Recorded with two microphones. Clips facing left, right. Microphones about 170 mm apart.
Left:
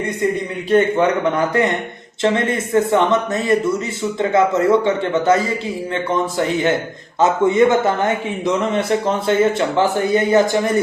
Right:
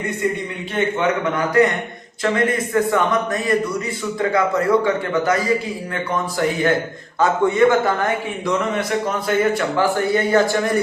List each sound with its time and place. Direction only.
0.7 s a man's voice: 30° left (ahead or behind)